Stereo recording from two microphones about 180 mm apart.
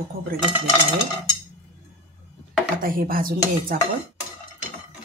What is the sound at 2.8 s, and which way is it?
Speech, 50° right (ahead or behind).